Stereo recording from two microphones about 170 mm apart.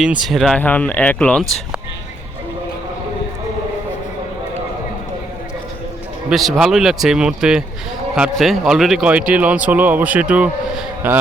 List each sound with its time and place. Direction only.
0.0 s speech: centre (ahead or behind)
6.3 s a man's voice: centre (ahead or behind)